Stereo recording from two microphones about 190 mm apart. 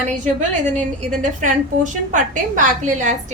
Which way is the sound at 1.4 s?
40° right (ahead or behind).